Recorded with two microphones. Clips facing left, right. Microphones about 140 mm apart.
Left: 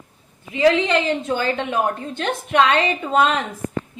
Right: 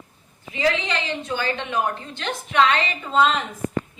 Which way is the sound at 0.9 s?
45° left (ahead or behind).